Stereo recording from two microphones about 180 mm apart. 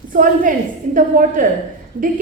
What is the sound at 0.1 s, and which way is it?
A woman's voice, 50° right (ahead or behind).